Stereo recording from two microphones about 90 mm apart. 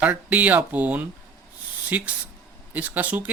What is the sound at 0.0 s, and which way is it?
Speech, 15° right (ahead or behind).